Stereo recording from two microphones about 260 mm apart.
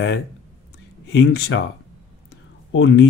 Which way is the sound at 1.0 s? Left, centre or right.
Left.